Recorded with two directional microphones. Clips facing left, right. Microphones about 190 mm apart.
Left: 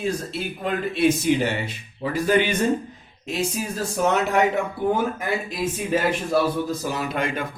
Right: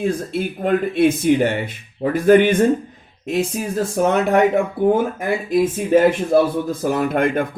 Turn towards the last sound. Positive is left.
turn(degrees=-55)  # may be behind; listen again after turning